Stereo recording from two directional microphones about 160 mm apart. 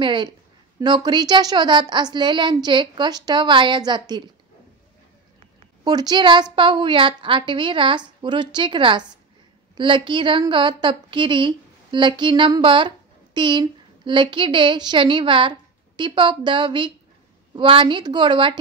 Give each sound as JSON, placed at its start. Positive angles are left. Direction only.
{"t": 0.0, "sound": "a woman's voice", "side_deg": -30}
{"t": 5.9, "sound": "a woman's voice", "side_deg": -25}